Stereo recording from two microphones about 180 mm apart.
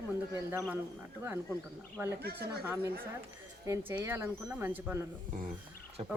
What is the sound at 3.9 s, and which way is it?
Speech, 15° right (ahead or behind).